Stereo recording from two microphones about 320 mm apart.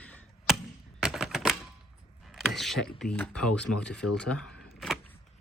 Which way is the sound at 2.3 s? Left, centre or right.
Centre.